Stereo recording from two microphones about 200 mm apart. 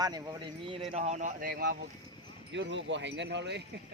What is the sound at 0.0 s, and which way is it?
Speech, 20° right (ahead or behind).